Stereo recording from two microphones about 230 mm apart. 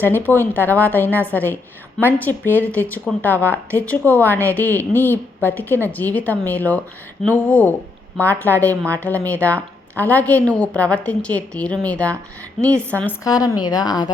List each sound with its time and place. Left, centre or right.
0.0 s a woman's voice: centre